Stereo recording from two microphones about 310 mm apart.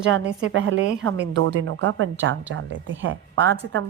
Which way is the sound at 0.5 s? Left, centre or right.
Right.